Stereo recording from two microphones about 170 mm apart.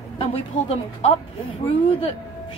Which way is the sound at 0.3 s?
35° left (ahead or behind).